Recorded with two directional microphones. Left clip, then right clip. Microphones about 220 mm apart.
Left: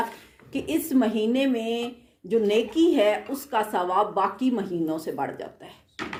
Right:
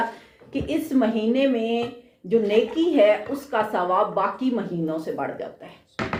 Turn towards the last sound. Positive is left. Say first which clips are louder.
# right 1 dB
turn(degrees=40)  # may be behind; listen again after turning